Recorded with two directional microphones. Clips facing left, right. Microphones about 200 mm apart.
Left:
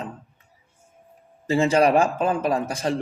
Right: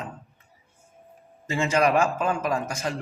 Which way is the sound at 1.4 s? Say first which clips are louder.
Left 4 dB; 35° left (ahead or behind).